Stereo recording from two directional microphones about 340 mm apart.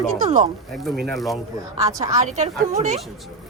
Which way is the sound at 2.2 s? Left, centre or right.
Right.